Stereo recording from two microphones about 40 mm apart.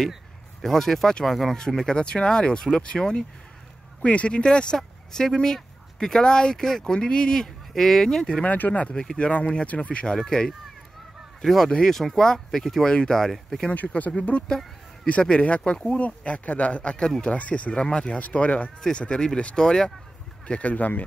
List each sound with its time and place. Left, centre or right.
0.6 s speech: centre
1.6 s speech: centre
4.0 s speech: left
7.7 s speech: centre
8.4 s speech: left
8.9 s speech: centre
9.3 s speech: left
10.1 s speech: centre
11.4 s speech: centre
12.8 s speech: centre
13.7 s speech: left
17.7 s speech: left
18.8 s speech: left
20.4 s speech: left